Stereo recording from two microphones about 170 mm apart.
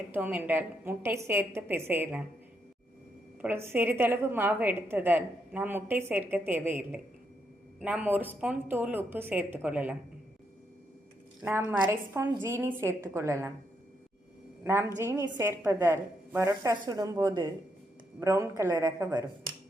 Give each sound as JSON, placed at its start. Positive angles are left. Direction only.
{"t": 0.1, "sound": "a woman's voice", "side_deg": -10}
{"t": 3.4, "sound": "a woman's voice", "side_deg": -15}
{"t": 11.9, "sound": "a woman's voice", "side_deg": -15}
{"t": 14.6, "sound": "a woman's voice", "side_deg": -15}